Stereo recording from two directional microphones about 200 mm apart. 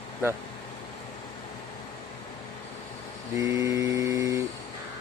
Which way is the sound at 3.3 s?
15° right (ahead or behind).